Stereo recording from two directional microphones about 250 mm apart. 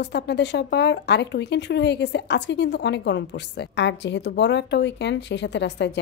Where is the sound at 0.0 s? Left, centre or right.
Left.